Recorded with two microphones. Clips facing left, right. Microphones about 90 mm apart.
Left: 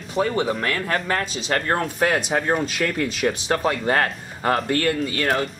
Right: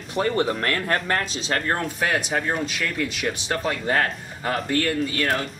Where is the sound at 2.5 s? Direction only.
40° left (ahead or behind).